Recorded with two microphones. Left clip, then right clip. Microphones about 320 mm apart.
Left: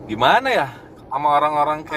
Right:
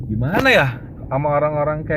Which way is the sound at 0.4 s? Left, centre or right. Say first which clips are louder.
Right 5 dB; centre.